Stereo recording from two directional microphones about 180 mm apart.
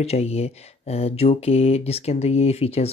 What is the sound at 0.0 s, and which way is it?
Speech, 35° left (ahead or behind).